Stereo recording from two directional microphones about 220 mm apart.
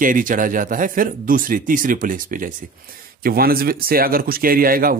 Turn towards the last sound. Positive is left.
turn(degrees=-40)  # may be behind; listen again after turning